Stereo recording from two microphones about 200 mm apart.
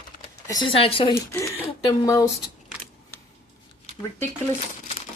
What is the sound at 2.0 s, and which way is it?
Speech, 15° left (ahead or behind).